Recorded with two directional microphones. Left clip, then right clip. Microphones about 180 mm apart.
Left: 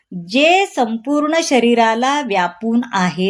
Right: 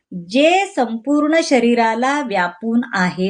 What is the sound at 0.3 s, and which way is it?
A woman's voice, 35° left (ahead or behind).